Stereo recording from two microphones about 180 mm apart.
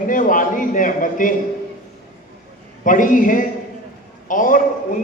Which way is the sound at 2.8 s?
45° left (ahead or behind).